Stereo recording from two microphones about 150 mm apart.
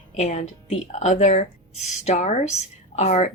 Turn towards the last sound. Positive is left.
turn(degrees=50)  # may be behind; listen again after turning